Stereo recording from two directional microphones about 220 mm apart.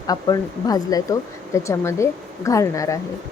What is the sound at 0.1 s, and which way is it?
Speech, 15° left (ahead or behind).